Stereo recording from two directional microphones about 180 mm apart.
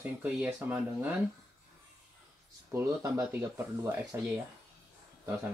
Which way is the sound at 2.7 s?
15° right (ahead or behind).